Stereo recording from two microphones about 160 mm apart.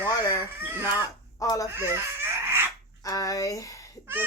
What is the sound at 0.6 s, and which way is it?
Speech, 15° right (ahead or behind).